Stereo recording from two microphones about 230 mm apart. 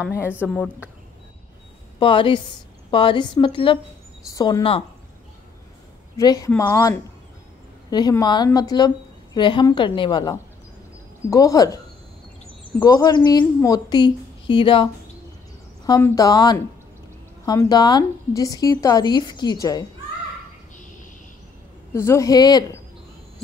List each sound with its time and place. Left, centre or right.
0.2 s a woman's voice: centre
2.0 s a woman's voice: left
6.1 s a woman's voice: centre
12.8 s a woman's voice: centre
21.9 s a woman's voice: centre